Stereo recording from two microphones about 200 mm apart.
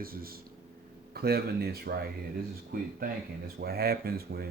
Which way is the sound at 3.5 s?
50° right (ahead or behind).